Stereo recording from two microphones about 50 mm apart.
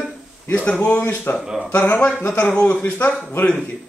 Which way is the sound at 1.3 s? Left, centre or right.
Left.